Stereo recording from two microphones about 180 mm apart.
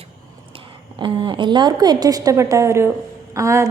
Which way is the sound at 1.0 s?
25° right (ahead or behind).